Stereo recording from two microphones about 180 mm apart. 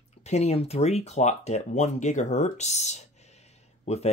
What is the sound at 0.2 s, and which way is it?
Speech, 35° left (ahead or behind).